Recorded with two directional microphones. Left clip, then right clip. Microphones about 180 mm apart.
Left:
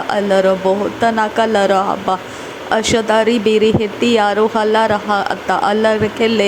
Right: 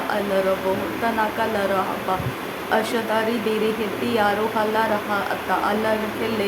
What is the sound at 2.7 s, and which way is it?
Speech, 40° left (ahead or behind).